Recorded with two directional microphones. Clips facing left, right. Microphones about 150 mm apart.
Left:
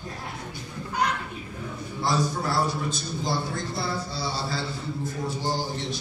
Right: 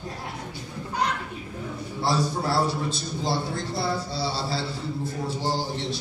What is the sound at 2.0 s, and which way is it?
A man's voice, 30° right (ahead or behind).